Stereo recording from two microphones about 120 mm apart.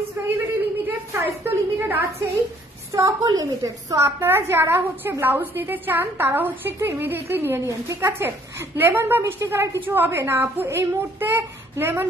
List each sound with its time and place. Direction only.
0.6 s a woman's voice: 20° right (ahead or behind)